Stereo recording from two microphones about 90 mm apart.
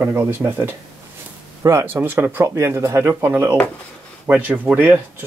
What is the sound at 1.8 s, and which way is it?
Speech, 25° right (ahead or behind).